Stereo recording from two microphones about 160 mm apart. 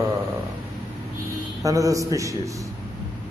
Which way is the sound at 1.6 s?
20° right (ahead or behind).